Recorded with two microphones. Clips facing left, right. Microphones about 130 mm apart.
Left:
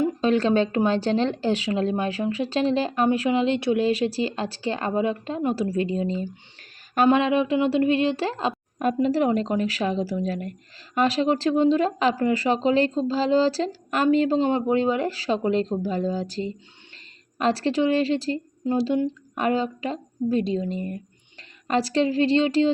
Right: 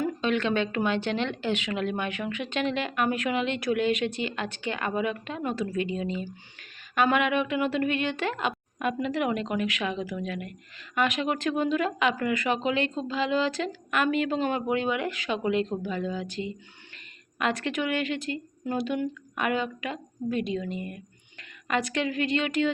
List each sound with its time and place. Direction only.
0.0 s a woman's voice: 35° left (ahead or behind)